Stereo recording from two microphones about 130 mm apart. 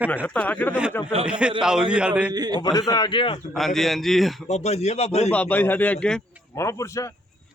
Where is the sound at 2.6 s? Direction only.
30° left (ahead or behind).